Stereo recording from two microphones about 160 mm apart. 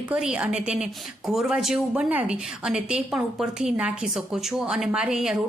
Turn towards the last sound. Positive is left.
turn(degrees=-5)  # may be behind; listen again after turning